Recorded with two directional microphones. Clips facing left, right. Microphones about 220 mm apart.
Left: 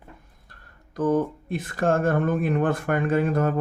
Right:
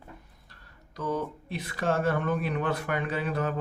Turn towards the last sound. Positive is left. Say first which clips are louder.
# left 8 dB
turn(degrees=45)  # may be behind; listen again after turning